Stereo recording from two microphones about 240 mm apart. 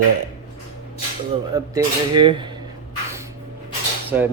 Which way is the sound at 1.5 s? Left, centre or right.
Centre.